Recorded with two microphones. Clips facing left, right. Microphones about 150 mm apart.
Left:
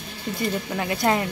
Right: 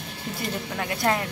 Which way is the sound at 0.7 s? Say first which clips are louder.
Left 2 dB; 5° left (ahead or behind).